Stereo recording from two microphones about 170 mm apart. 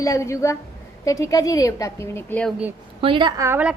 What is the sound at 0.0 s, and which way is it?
A woman's voice, 20° left (ahead or behind).